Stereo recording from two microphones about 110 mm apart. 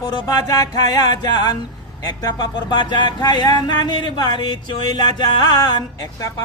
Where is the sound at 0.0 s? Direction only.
30° left (ahead or behind).